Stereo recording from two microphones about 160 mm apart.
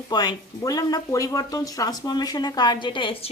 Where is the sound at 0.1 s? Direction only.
25° left (ahead or behind).